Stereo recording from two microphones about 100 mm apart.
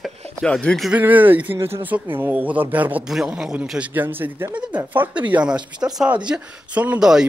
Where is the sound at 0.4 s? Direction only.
10° left (ahead or behind).